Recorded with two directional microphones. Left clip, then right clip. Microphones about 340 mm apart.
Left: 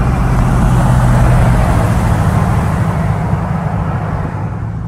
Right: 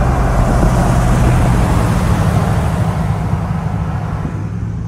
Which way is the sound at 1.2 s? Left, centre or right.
Centre.